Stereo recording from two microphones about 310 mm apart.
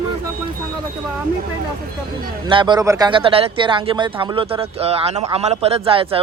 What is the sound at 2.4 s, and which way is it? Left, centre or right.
Speech, centre.